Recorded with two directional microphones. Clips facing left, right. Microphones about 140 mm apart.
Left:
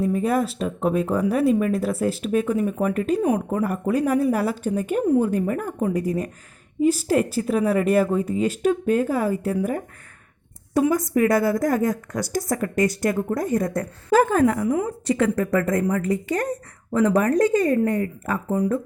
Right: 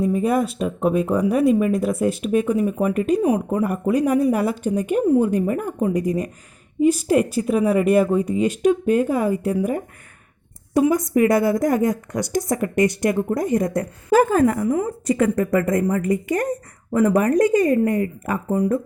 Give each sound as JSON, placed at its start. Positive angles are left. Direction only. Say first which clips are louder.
{"t": 0.0, "sound": "a woman's voice", "louder": "right 2 dB", "side_deg": -10}
{"t": 5.3, "sound": "a woman's voice", "louder": "right 2 dB", "side_deg": -15}
{"t": 7.4, "sound": "a woman's voice", "louder": "right 2 dB", "side_deg": -10}
{"t": 14.8, "sound": "a woman's voice", "louder": "right 2 dB", "side_deg": -10}